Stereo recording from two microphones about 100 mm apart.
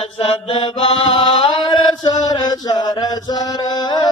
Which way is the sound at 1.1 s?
55° left (ahead or behind).